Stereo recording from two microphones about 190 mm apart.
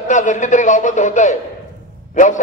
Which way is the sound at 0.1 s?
40° left (ahead or behind).